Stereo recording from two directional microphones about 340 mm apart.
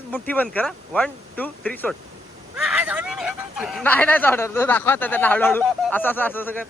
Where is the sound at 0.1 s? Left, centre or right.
Centre.